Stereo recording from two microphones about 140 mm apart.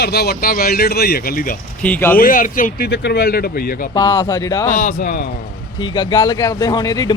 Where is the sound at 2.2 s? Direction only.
75° left (ahead or behind).